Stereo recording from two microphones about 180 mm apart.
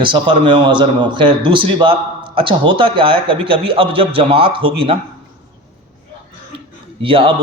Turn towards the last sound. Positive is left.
turn(degrees=-30)  # may be behind; listen again after turning